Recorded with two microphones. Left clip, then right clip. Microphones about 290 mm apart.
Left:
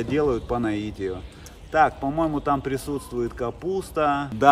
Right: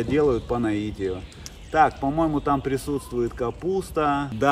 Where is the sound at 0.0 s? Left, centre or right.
Centre.